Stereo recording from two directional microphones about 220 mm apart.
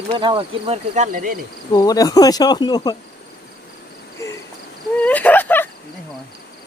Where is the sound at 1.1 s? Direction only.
40° right (ahead or behind).